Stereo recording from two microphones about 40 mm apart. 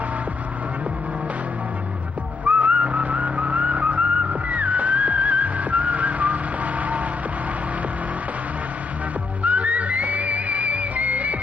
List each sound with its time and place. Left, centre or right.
2.4 s whistling: right
9.4 s music: right